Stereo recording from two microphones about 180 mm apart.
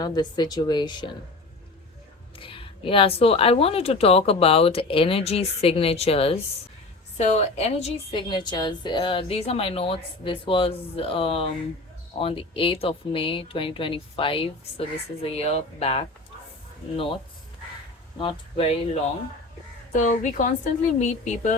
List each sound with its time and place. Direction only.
0.0 s speech: 25° left (ahead or behind)
2.4 s a woman's voice: 30° left (ahead or behind)
18.2 s speech: 30° left (ahead or behind)
19.9 s a woman's voice: 45° left (ahead or behind)